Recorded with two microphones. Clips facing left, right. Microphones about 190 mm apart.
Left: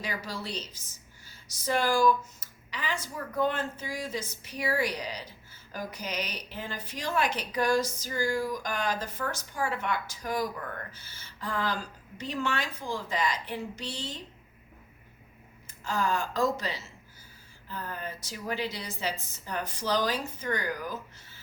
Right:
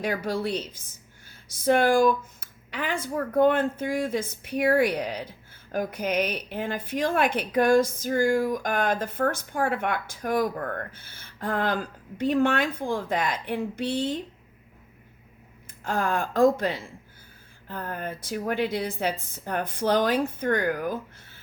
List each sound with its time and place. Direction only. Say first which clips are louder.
0.0 s speech: right 9 dB; 55° right (ahead or behind)
15.6 s speech: right 3 dB; 55° right (ahead or behind)